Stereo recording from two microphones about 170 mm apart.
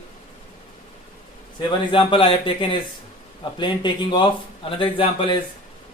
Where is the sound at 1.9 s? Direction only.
30° left (ahead or behind).